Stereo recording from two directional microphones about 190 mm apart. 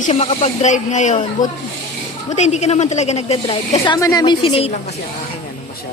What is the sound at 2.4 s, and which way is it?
A woman's voice, 35° left (ahead or behind).